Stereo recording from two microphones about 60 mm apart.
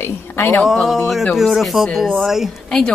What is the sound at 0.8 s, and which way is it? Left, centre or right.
A woman's voice, centre.